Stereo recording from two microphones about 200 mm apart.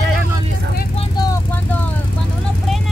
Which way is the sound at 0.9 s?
20° left (ahead or behind).